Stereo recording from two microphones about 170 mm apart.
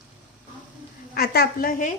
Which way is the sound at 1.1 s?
70° left (ahead or behind).